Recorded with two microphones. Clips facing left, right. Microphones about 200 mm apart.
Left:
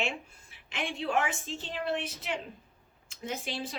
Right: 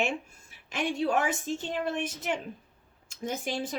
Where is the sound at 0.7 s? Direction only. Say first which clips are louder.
Right 4 dB; 45° right (ahead or behind).